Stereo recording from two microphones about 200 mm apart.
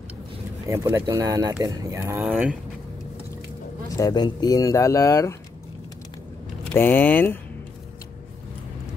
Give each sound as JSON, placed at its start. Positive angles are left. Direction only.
{"t": 0.7, "sound": "speech", "side_deg": -15}
{"t": 3.9, "sound": "speech", "side_deg": 20}
{"t": 6.7, "sound": "speech", "side_deg": 10}